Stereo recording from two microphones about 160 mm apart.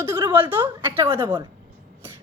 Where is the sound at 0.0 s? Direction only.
15° right (ahead or behind).